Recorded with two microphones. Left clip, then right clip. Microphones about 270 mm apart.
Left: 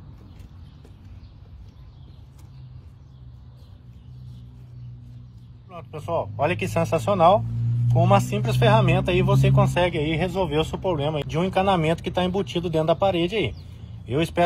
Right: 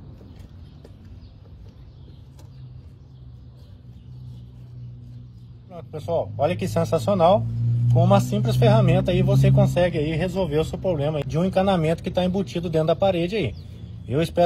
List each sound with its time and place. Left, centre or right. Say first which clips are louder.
5.7 s speech: right 2 dB; centre
6.8 s speech: right 1 dB; centre
7.1 s speech: left 1 dB; centre
7.6 s a sound: even; centre
8.4 s speech: even; centre
13.7 s a sound: right 1 dB; centre